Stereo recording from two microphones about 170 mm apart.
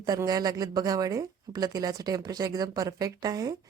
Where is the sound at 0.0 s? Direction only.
20° right (ahead or behind).